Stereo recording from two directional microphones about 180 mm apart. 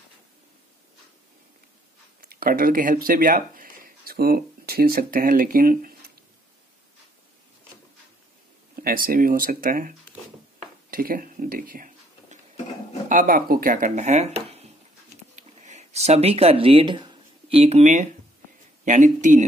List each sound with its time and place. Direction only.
2.2 s speech: 50° right (ahead or behind)
8.7 s speech: 55° right (ahead or behind)
10.9 s a sound: 50° right (ahead or behind)
13.1 s speech: 50° right (ahead or behind)
15.3 s a sound: 40° right (ahead or behind)
18.9 s speech: 45° right (ahead or behind)